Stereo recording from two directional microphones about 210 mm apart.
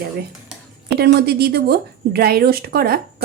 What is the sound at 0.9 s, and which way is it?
A woman's voice, 50° right (ahead or behind).